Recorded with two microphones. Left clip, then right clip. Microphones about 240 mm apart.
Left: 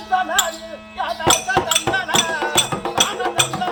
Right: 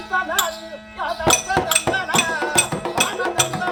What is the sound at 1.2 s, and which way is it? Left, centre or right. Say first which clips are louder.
Music: left 1 dB; centre.